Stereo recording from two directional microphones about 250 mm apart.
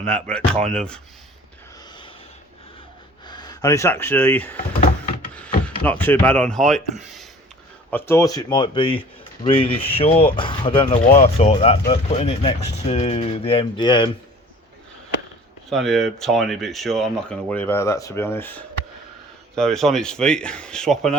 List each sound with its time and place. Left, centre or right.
0.0 s speech: centre
3.2 s speech: centre
4.5 s a sound: left
5.6 s speech: centre
15.7 s speech: centre